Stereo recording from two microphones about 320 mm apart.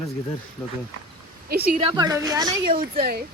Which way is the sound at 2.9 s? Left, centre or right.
Right.